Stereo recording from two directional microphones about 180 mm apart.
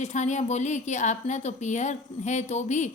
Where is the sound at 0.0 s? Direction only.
40° left (ahead or behind).